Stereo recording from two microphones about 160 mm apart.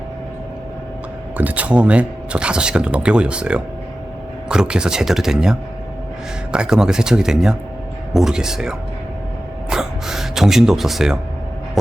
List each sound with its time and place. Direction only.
1.4 s speech: 10° right (ahead or behind)
9.6 s gasp: 5° right (ahead or behind)